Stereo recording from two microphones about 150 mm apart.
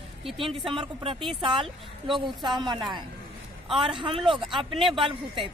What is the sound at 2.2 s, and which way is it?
Speech, 30° right (ahead or behind).